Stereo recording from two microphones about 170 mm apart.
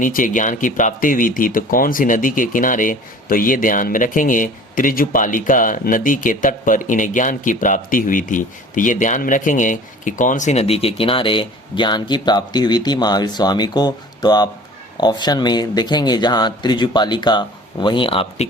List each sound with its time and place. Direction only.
0.0 s speech: 50° left (ahead or behind); by 18.4 s 35° left (ahead or behind)